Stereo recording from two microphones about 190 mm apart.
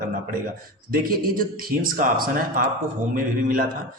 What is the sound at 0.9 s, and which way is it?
A man's voice, 50° right (ahead or behind).